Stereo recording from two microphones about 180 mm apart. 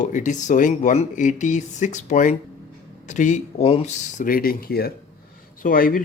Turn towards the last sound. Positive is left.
turn(degrees=50)  # may be behind; listen again after turning